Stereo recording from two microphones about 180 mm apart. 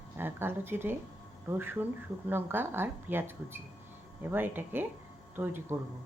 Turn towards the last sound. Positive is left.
turn(degrees=-10)  # may be behind; listen again after turning